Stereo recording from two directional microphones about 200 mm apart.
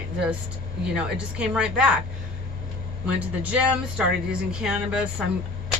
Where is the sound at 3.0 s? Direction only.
5° right (ahead or behind).